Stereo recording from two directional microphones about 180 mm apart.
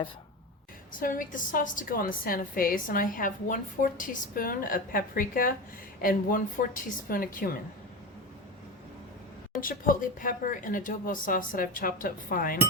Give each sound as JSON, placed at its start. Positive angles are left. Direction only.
{"t": 0.9, "sound": "a woman's voice", "side_deg": 50}
{"t": 9.6, "sound": "a woman's voice", "side_deg": 50}